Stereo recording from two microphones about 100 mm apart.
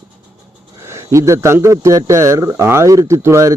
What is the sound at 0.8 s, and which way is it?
Speech, 30° right (ahead or behind).